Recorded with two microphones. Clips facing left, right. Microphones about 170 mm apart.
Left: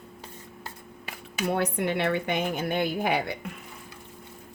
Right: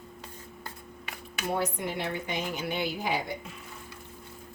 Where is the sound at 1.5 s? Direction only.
65° left (ahead or behind).